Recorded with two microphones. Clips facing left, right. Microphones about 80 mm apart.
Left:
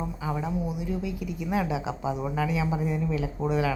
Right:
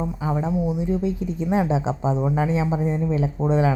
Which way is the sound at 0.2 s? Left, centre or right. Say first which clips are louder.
Right 6 dB; right.